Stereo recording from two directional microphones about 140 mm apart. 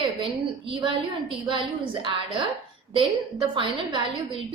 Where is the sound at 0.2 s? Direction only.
35° right (ahead or behind).